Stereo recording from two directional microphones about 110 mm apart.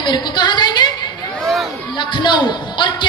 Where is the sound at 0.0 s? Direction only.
40° left (ahead or behind).